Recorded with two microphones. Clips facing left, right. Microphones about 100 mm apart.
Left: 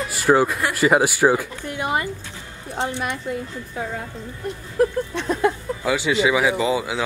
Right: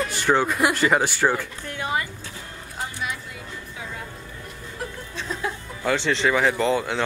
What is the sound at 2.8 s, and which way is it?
Speech, 25° left (ahead or behind).